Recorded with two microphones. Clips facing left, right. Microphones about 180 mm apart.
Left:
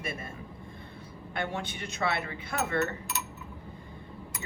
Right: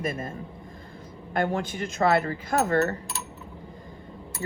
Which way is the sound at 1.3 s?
45° right (ahead or behind).